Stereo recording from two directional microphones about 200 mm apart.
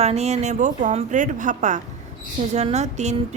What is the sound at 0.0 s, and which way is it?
Speech, 30° right (ahead or behind).